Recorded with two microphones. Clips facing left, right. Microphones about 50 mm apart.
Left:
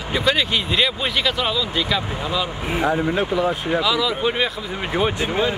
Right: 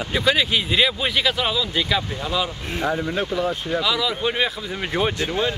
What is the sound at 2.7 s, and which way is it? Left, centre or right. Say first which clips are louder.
A man's voice: left 3 dB; centre.